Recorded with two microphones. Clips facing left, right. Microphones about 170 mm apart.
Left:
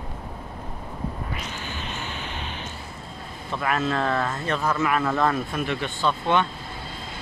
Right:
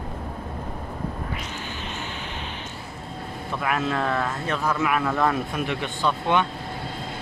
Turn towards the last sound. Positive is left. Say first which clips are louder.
# even
turn(degrees=-15)  # may be behind; listen again after turning